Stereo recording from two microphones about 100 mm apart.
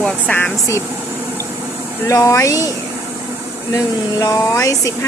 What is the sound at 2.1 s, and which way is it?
Speech, 30° left (ahead or behind).